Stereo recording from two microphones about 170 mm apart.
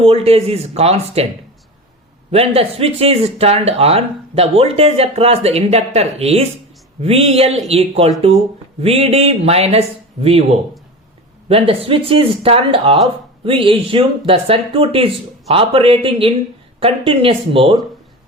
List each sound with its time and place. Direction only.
0.0 s speech: 35° right (ahead or behind)
2.3 s speech: 35° right (ahead or behind)
11.4 s speech: 35° right (ahead or behind)